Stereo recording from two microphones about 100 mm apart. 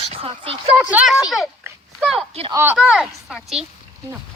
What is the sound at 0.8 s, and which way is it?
Speech, 15° right (ahead or behind).